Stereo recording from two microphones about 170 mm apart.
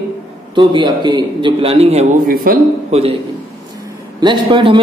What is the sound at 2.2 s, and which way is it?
Speech, 55° right (ahead or behind).